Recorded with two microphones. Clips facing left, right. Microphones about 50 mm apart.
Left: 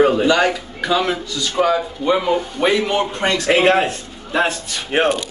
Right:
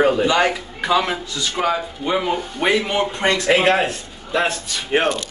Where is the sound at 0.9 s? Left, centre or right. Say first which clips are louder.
Left 1 dB; centre.